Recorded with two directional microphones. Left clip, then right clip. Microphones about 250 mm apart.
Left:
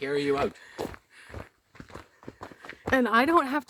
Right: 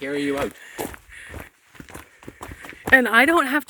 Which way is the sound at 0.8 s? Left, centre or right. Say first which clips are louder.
Right 4 dB; right.